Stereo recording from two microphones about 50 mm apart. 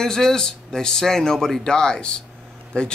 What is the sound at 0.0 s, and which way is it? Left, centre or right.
A man's voice, centre.